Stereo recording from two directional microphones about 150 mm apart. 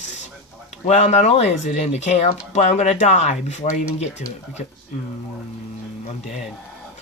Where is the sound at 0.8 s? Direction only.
50° left (ahead or behind).